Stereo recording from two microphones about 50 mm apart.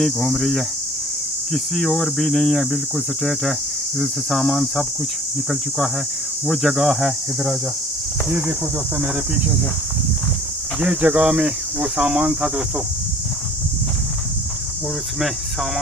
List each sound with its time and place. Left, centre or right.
0.0 s speech: centre
4.0 s speech: centre
6.4 s speech: centre
8.3 s speech: right
10.8 s speech: right